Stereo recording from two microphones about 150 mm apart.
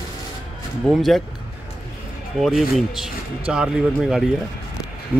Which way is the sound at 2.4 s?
Centre (ahead or behind).